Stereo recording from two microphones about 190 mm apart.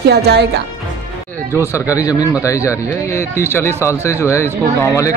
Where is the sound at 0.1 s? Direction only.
60° right (ahead or behind).